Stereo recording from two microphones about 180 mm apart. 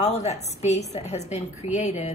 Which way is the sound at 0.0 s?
35° left (ahead or behind).